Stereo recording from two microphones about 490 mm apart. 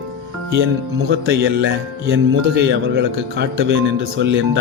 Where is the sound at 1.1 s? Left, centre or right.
Right.